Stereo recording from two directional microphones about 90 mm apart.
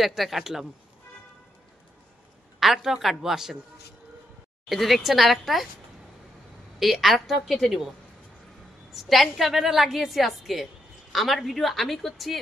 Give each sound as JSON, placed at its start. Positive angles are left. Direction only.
{"t": 0.0, "sound": "a woman's voice", "side_deg": 0}
{"t": 2.6, "sound": "a woman's voice", "side_deg": -5}
{"t": 4.6, "sound": "a woman's voice", "side_deg": 0}
{"t": 6.8, "sound": "a woman's voice", "side_deg": 0}
{"t": 8.9, "sound": "a woman's voice", "side_deg": 0}